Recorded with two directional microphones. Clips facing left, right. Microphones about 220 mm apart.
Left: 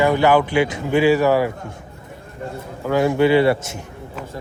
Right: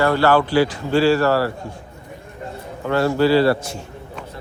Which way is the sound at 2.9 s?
15° left (ahead or behind).